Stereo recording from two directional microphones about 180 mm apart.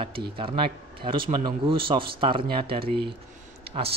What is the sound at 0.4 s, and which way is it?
Speech, 30° right (ahead or behind).